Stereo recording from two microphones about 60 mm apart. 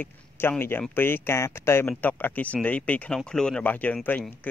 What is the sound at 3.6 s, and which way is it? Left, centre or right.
Speech, left.